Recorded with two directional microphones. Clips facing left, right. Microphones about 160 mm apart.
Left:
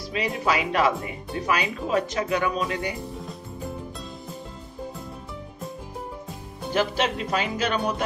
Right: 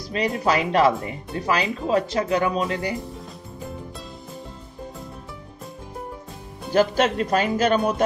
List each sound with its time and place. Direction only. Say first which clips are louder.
0.1 s speech: right 3 dB; 40° right (ahead or behind)
6.7 s speech: right 5 dB; 45° right (ahead or behind)